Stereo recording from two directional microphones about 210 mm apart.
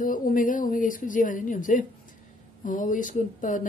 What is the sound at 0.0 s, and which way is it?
Speech, 40° left (ahead or behind).